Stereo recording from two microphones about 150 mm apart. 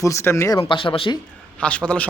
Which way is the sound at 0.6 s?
35° left (ahead or behind).